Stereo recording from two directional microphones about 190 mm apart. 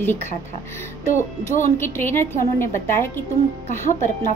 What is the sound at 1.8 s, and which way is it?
A woman's voice, 10° left (ahead or behind).